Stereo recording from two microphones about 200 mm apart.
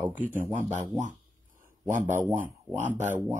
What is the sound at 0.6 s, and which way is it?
Speech, 35° right (ahead or behind).